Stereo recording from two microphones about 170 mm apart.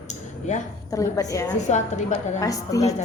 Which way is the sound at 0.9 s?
20° left (ahead or behind).